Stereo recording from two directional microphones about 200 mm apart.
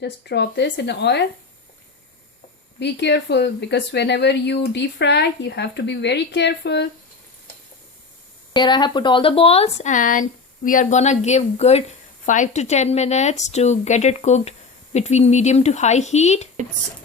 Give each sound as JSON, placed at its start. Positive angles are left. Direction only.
{"t": 0.0, "sound": "speech", "side_deg": 60}
{"t": 2.7, "sound": "speech", "side_deg": 60}
{"t": 8.5, "sound": "speech", "side_deg": 20}